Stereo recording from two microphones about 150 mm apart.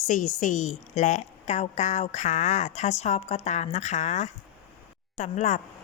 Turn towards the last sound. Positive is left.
turn(degrees=55)  # may be behind; listen again after turning